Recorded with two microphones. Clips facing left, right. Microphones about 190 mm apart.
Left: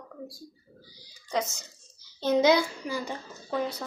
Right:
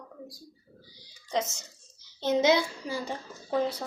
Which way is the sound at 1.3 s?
25° right (ahead or behind).